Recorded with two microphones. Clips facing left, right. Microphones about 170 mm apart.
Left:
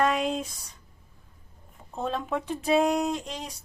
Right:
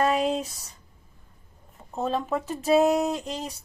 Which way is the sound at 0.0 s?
35° right (ahead or behind).